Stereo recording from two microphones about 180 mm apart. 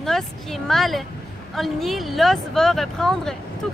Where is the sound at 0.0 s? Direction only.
Centre (ahead or behind).